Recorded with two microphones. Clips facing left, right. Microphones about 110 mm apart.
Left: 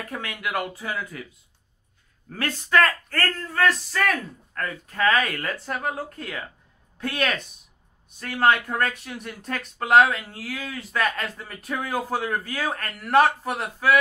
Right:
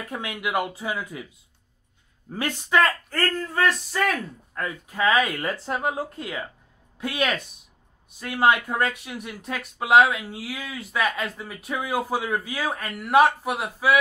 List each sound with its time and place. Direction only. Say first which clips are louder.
0.1 s speech: right 3 dB; 15° right (ahead or behind)
2.2 s speech: right 1 dB; 15° right (ahead or behind)